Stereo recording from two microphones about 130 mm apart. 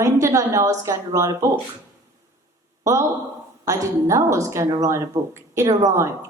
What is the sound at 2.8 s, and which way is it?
A woman's voice, 20° right (ahead or behind).